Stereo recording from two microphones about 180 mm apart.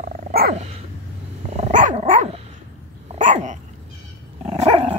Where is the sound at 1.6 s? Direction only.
45° right (ahead or behind).